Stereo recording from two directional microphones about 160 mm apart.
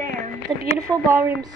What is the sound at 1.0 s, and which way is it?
Speech, 15° right (ahead or behind).